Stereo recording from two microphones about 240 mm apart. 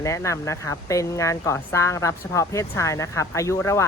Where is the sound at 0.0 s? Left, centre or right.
Centre.